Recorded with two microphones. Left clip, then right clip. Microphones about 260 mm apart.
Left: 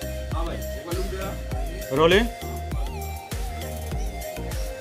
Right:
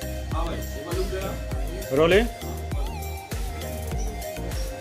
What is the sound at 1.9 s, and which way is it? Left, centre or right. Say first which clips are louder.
Speech: even; left.